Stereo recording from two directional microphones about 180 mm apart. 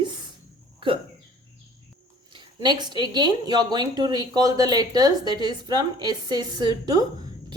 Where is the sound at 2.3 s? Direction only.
25° right (ahead or behind).